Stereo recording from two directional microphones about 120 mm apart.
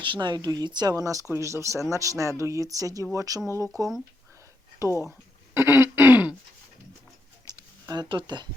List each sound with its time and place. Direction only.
0.0 s speech: 40° right (ahead or behind)
5.5 s throat clearing: 20° right (ahead or behind)
7.4 s a sound: 35° right (ahead or behind)
8.1 s speech: 40° right (ahead or behind)